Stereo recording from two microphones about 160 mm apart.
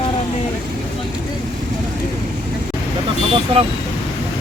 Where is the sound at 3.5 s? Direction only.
35° right (ahead or behind).